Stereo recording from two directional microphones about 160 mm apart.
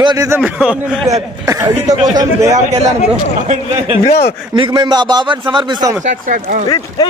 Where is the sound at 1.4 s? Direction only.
20° right (ahead or behind).